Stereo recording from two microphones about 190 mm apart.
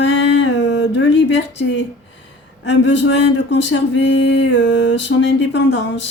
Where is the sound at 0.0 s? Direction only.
70° left (ahead or behind).